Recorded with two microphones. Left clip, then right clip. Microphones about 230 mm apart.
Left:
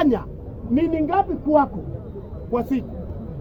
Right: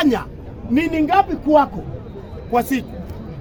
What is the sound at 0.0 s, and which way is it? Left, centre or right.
A woman's voice, centre.